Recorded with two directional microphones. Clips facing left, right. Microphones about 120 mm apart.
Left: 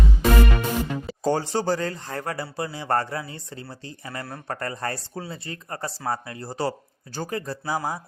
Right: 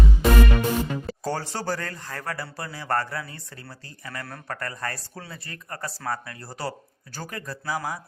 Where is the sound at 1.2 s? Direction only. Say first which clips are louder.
Left 6 dB; 20° left (ahead or behind).